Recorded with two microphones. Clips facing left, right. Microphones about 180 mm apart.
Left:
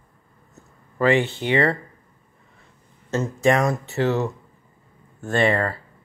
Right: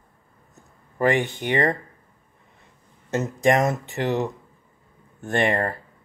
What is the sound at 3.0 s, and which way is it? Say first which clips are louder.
Speech: left 1 dB; 20° right (ahead or behind).